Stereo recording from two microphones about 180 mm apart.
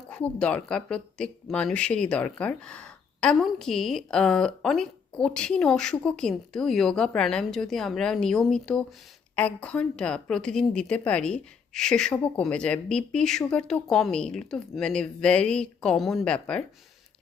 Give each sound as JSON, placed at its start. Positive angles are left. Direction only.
{"t": 0.1, "sound": "speech", "side_deg": 5}